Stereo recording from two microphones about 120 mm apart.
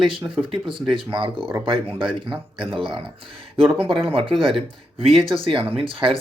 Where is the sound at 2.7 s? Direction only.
45° right (ahead or behind).